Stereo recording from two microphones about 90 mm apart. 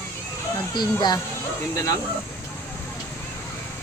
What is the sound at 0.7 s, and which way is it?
Speech, 55° left (ahead or behind).